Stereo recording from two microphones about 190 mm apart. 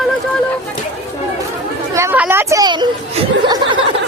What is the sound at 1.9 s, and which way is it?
Speech, 10° right (ahead or behind).